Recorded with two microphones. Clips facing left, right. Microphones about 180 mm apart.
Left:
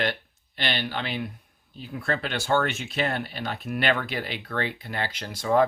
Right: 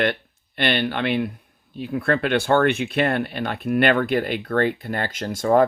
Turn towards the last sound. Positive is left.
turn(degrees=-50)  # may be behind; listen again after turning